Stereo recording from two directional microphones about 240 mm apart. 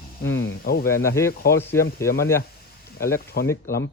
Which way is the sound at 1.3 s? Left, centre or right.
Left.